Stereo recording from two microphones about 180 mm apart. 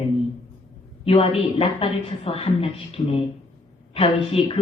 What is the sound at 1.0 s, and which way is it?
Speech, 30° left (ahead or behind).